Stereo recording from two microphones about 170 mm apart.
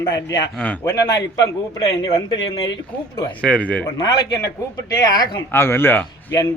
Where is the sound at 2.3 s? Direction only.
90° left.